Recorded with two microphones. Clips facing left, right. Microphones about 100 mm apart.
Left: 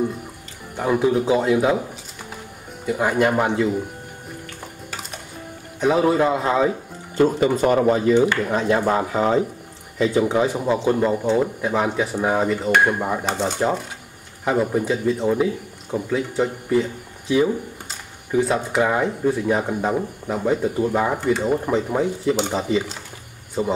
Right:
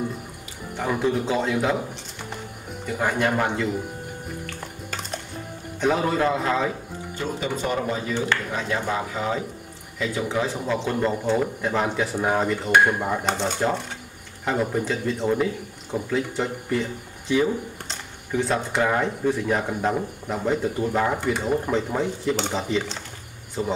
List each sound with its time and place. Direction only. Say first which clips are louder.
0.7 s speech: left 5 dB; 10° left (ahead or behind)
3.0 s speech: left 4 dB; 10° left (ahead or behind)
5.8 s speech: left 5 dB; 5° left (ahead or behind)
6.1 s speech: left 4 dB; 15° left (ahead or behind)
7.2 s speech: left 11 dB; 50° left (ahead or behind)
8.5 s speech: left 7 dB; 40° left (ahead or behind)
9.9 s speech: left 7 dB; 20° left (ahead or behind)